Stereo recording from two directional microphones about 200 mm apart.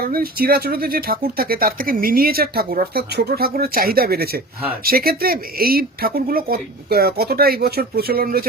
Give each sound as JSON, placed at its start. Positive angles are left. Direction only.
{"t": 0.0, "sound": "speech", "side_deg": -50}